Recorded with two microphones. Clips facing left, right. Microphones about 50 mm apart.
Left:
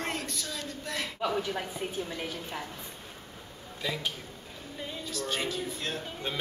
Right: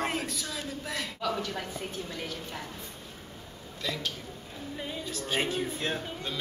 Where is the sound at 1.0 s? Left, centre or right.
Centre.